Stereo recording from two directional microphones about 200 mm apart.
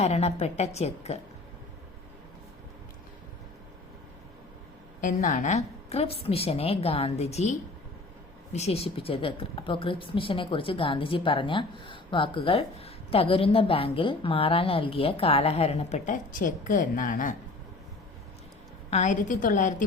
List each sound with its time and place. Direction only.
0.0 s a woman's voice: 30° left (ahead or behind)
4.9 s a woman's voice: 40° left (ahead or behind)
8.5 s a woman's voice: 30° left (ahead or behind)
18.9 s a woman's voice: 35° left (ahead or behind)